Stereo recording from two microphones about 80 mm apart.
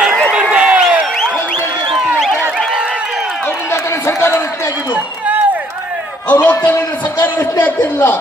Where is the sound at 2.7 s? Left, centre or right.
Centre.